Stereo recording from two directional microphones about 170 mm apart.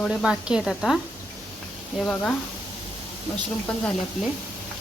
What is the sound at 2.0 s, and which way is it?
Speech, 5° left (ahead or behind).